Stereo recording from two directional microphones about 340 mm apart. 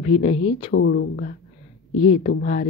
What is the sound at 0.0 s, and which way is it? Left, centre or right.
Speech, centre.